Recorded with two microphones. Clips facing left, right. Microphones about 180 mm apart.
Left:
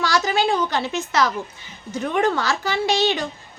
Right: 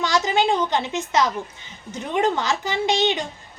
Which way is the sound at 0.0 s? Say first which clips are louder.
Even; 20° right (ahead or behind).